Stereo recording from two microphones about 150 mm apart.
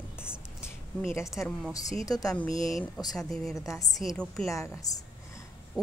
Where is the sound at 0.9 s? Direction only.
10° left (ahead or behind).